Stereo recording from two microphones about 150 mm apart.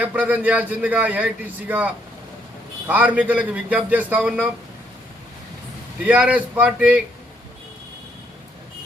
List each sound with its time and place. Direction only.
0.0 s a man's voice: 10° right (ahead or behind)
6.1 s a man's voice: 10° right (ahead or behind)